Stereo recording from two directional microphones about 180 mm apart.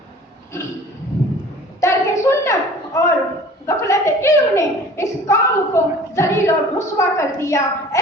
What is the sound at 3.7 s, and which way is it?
Chuckle, 15° left (ahead or behind).